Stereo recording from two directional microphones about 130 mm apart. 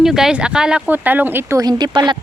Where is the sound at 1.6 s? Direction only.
30° right (ahead or behind).